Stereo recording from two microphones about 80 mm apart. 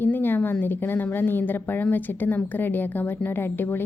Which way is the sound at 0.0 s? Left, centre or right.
Left.